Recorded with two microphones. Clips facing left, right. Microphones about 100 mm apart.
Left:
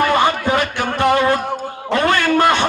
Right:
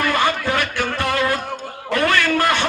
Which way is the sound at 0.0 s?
20° left (ahead or behind).